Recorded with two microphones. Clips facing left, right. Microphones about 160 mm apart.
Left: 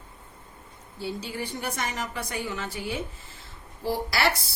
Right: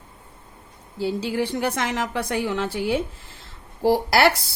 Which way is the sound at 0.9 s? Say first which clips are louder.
Right 9 dB; 90° right.